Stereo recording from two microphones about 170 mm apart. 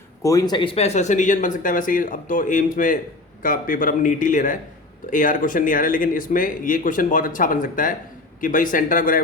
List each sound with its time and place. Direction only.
0.2 s speech: 20° left (ahead or behind); by 9.2 s 55° left (ahead or behind)